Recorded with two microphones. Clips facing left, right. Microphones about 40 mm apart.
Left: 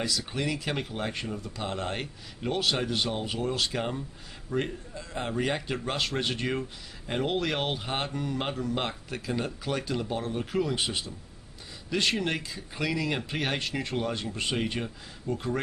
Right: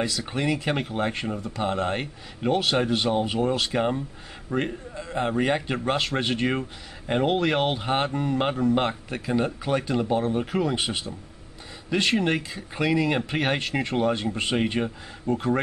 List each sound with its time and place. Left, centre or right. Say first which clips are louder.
0.0 s speech: right 4 dB; right